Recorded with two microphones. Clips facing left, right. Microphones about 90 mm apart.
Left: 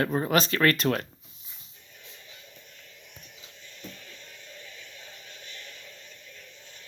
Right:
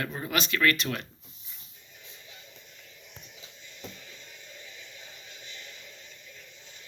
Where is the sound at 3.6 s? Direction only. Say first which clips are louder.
Even; 15° right (ahead or behind).